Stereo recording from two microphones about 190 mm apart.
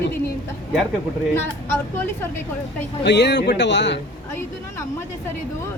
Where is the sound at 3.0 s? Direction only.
65° left (ahead or behind).